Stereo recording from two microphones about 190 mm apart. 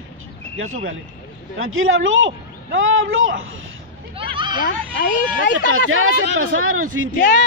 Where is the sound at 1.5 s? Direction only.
90° right.